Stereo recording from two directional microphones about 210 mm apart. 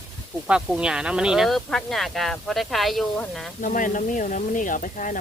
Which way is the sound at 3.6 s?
40° left (ahead or behind).